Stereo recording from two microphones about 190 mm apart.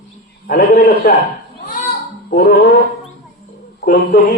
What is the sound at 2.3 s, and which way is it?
Music, 55° left (ahead or behind).